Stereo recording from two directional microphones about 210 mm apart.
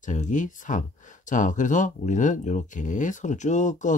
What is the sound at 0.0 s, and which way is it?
Speech, 35° left (ahead or behind).